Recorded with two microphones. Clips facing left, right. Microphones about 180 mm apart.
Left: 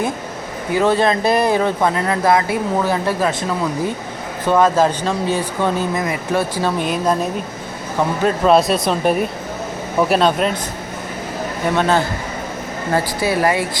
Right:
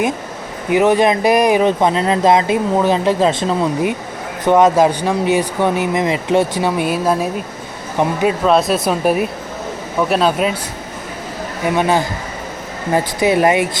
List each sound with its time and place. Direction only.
0.7 s speech: 15° right (ahead or behind)
4.4 s speech: 20° right (ahead or behind)
8.4 s speech: centre (ahead or behind)
11.6 s speech: 15° right (ahead or behind)